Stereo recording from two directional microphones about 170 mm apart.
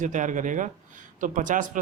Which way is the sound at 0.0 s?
50° right (ahead or behind).